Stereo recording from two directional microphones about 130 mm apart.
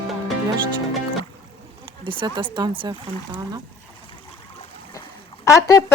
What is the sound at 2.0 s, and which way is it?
Speech, 40° right (ahead or behind).